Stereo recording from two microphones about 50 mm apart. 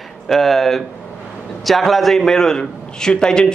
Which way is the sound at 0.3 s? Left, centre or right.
Centre.